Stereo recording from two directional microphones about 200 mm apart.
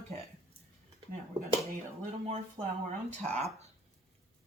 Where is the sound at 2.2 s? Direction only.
35° right (ahead or behind).